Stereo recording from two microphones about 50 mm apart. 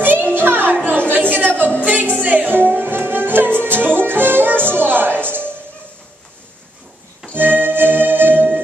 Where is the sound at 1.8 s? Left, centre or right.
Right.